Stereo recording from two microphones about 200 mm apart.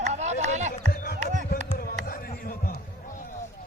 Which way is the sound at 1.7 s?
50° left (ahead or behind).